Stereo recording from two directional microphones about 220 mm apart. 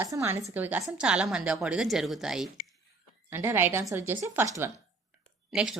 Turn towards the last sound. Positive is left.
turn(degrees=0)  # may be behind; listen again after turning